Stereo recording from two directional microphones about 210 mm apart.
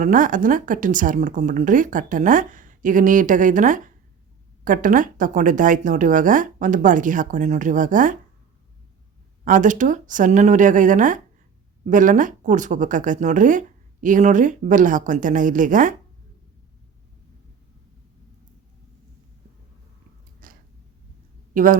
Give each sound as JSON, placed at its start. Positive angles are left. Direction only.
{"t": 0.0, "sound": "speech", "side_deg": -40}
{"t": 9.4, "sound": "speech", "side_deg": -40}
{"t": 20.4, "sound": "a sound", "side_deg": -40}
{"t": 21.5, "sound": "speech", "side_deg": -40}